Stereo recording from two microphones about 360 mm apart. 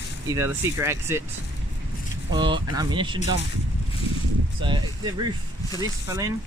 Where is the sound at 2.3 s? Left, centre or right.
Centre.